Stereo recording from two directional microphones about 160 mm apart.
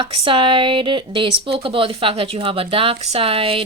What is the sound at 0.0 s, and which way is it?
Speech, 35° right (ahead or behind).